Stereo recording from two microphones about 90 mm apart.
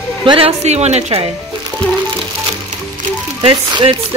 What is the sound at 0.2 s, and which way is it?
Speech, 65° right (ahead or behind).